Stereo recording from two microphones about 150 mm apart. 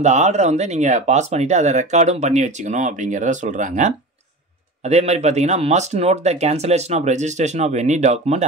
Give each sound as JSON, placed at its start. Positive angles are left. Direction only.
{"t": 0.0, "sound": "speech", "side_deg": -50}